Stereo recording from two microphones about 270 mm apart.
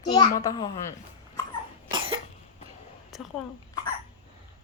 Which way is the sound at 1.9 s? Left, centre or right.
Centre.